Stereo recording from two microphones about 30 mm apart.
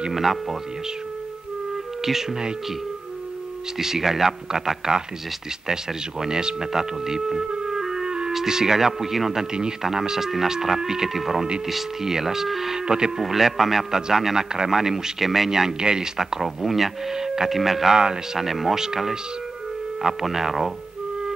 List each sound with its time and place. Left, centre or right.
0.1 s speech: centre
3.8 s speech: centre
6.2 s speech: right
9.5 s speech: right; by 12.7 s centre
12.7 s speech: right
13.2 s speech: centre
15.8 s speech: right
16.2 s speech: centre
17.1 s speech: centre
17.5 s speech: centre
17.8 s speech: right
18.4 s speech: centre
20.0 s speech: centre